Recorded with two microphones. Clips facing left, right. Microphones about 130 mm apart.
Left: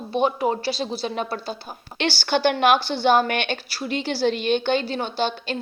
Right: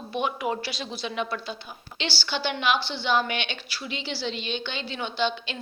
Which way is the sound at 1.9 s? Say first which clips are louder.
Left 8 dB; 50° left (ahead or behind).